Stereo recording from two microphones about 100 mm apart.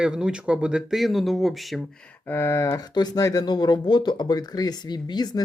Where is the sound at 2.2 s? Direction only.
25° left (ahead or behind).